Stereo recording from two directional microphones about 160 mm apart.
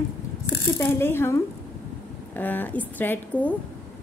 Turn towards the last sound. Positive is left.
turn(degrees=10)  # may be behind; listen again after turning